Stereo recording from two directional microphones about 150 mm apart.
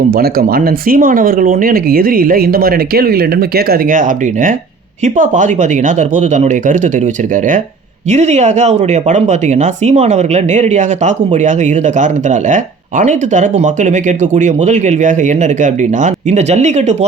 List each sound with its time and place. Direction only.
0.1 s speech: 80° right; by 6.9 s 55° right (ahead or behind)
8.1 s speech: 50° right (ahead or behind)